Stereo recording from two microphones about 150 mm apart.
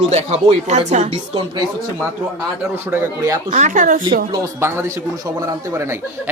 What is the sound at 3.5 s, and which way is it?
Speech, 55° right (ahead or behind).